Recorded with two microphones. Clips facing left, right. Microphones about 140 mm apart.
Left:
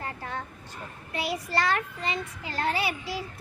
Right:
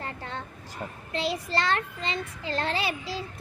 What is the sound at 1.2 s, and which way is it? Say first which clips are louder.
A child's voice: even; 25° right (ahead or behind).